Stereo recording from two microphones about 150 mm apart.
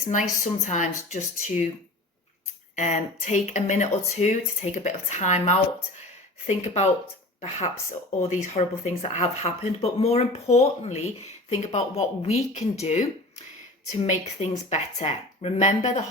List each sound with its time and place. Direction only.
0.3 s speech: 50° left (ahead or behind)
2.7 s speech: 50° left (ahead or behind)